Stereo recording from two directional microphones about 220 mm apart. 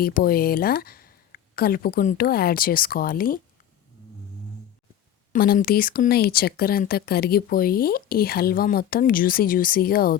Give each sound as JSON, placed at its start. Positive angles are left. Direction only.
{"t": 0.0, "sound": "speech", "side_deg": 40}
{"t": 5.3, "sound": "speech", "side_deg": 40}